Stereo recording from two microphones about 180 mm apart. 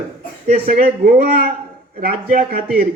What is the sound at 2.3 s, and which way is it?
Speech, 50° right (ahead or behind).